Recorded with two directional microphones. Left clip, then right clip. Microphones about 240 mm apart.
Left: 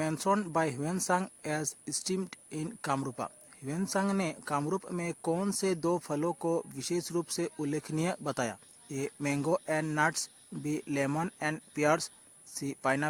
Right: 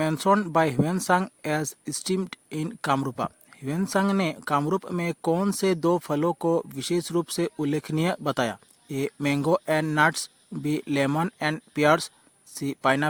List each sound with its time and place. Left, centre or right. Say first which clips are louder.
0.3 s speech: right 8 dB; right